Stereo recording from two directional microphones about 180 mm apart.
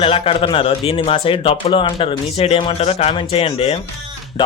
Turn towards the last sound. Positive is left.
turn(degrees=35)  # may be behind; listen again after turning